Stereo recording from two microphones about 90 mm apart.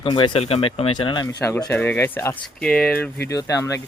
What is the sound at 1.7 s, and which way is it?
Speech, 20° left (ahead or behind).